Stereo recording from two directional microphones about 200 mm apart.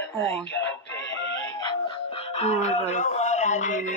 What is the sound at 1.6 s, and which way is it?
Music, 25° left (ahead or behind).